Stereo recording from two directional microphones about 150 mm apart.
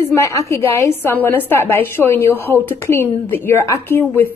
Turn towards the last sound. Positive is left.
turn(degrees=15)  # may be behind; listen again after turning